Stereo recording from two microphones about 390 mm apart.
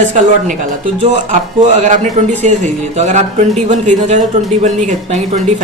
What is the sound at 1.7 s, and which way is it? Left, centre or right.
Speech, centre.